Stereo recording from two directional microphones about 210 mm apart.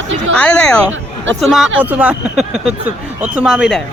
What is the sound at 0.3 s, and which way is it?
Speech, 5° left (ahead or behind).